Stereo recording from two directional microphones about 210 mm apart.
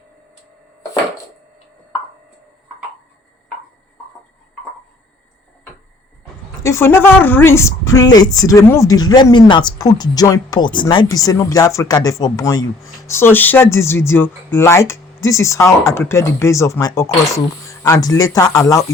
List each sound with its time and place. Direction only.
6.6 s a woman's voice: 15° left (ahead or behind)